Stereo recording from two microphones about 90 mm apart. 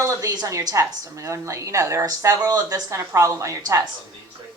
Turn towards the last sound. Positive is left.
turn(degrees=-35)  # may be behind; listen again after turning